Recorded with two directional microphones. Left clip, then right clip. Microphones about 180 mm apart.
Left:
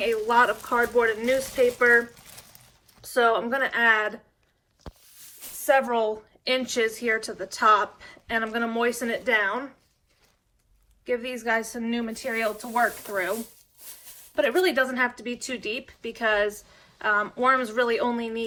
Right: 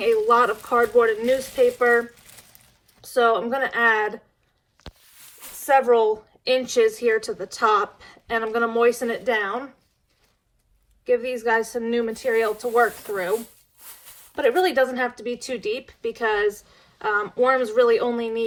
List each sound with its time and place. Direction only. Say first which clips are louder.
0.0 s speech: right 3 dB; 20° right (ahead or behind)
5.8 s speech: right 7 dB; 30° right (ahead or behind)
11.0 s speech: right 6 dB; 25° right (ahead or behind)
14.3 s speech: right 3 dB; 30° right (ahead or behind)